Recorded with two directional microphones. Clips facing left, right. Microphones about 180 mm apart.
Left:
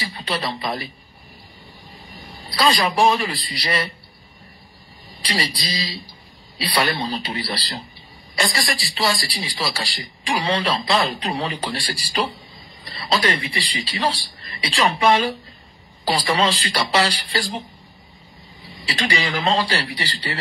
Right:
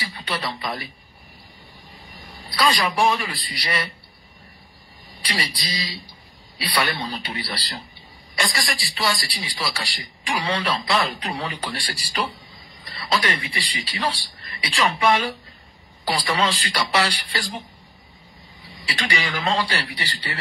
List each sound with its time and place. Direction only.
0.0 s speech: 25° left (ahead or behind)
2.5 s a man's voice: 25° left (ahead or behind)
5.2 s a man's voice: 25° left (ahead or behind)
18.9 s a man's voice: 25° left (ahead or behind)